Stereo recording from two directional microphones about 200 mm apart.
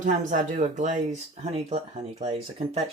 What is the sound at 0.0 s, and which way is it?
Speech, 40° right (ahead or behind).